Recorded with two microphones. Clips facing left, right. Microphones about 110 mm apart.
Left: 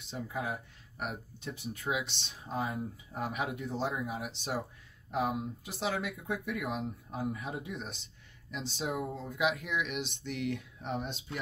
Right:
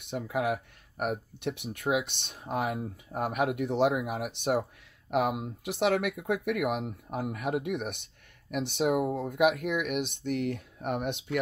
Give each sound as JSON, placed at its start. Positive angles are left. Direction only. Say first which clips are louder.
{"t": 0.0, "sound": "speech", "louder": "right 7 dB", "side_deg": -65}
{"t": 0.9, "sound": "speech", "louder": "right 8 dB", "side_deg": -50}
{"t": 1.5, "sound": "speech", "louder": "right 6 dB", "side_deg": -70}
{"t": 3.1, "sound": "speech", "louder": "right 8 dB", "side_deg": -60}
{"t": 5.1, "sound": "speech", "louder": "right 4 dB", "side_deg": -70}